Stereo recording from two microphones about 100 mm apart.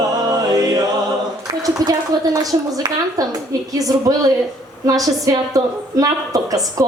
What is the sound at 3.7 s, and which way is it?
A woman's voice, 35° right (ahead or behind).